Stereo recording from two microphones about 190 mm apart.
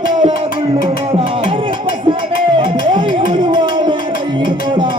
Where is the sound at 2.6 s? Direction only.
25° right (ahead or behind).